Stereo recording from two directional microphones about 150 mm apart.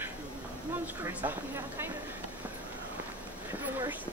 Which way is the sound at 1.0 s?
15° right (ahead or behind).